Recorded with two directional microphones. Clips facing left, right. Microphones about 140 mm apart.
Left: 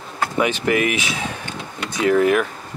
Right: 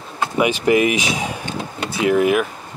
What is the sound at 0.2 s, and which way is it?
Speech, 15° right (ahead or behind).